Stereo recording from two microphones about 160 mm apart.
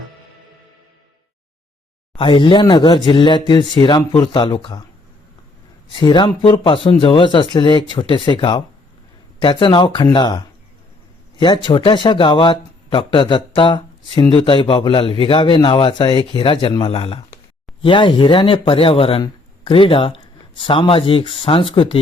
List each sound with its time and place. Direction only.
2.1 s speech: 30° left (ahead or behind)
6.0 s a man's voice: 30° left (ahead or behind)